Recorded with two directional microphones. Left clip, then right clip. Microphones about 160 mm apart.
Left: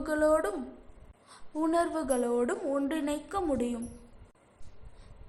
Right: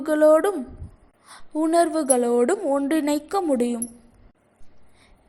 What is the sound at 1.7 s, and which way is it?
A woman's voice, 25° right (ahead or behind).